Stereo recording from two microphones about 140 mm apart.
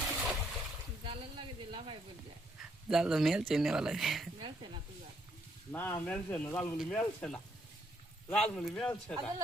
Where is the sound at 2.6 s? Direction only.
5° right (ahead or behind).